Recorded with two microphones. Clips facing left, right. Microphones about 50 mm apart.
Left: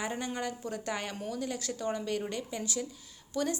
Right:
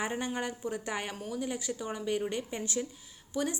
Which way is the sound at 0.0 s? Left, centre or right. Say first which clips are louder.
Right 1 dB; right.